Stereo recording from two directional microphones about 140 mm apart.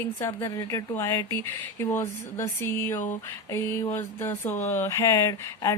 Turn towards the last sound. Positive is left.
turn(degrees=25)  # may be behind; listen again after turning